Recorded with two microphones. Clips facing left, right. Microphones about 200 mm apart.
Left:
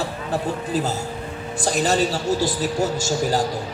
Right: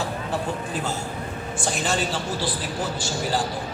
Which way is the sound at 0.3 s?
40° left (ahead or behind).